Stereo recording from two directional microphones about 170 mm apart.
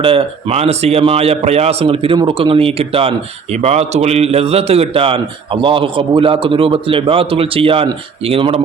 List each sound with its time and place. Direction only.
0.0 s a man's voice: 30° right (ahead or behind)